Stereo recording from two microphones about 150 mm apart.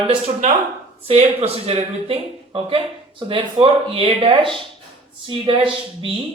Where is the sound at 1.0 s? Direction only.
45° right (ahead or behind).